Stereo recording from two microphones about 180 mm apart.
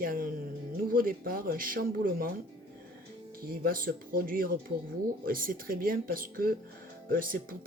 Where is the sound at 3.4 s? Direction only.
55° right (ahead or behind).